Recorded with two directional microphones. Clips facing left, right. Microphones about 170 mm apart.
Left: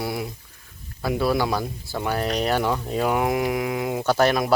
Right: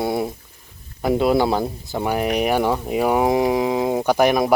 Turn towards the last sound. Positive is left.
turn(degrees=-15)  # may be behind; listen again after turning